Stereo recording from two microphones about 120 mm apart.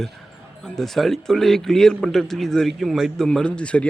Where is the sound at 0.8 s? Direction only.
Centre (ahead or behind).